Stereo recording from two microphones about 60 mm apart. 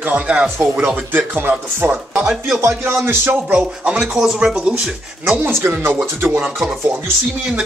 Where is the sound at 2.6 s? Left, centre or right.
Right.